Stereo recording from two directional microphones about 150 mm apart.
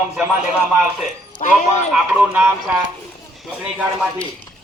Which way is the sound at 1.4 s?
55° left (ahead or behind).